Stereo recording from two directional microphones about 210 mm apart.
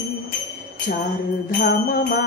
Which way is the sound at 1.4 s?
45° left (ahead or behind).